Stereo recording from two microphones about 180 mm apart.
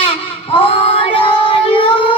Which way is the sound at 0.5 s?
30° left (ahead or behind).